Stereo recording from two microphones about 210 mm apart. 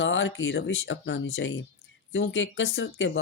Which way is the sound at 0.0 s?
60° left (ahead or behind).